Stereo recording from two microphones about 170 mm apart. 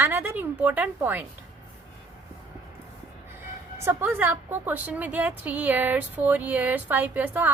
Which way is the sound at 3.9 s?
10° right (ahead or behind).